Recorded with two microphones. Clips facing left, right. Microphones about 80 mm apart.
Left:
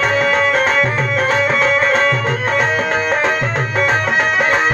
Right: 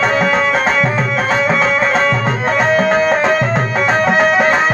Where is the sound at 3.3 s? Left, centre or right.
Right.